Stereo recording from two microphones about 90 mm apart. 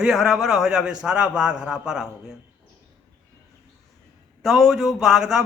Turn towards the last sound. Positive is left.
turn(degrees=-5)  # may be behind; listen again after turning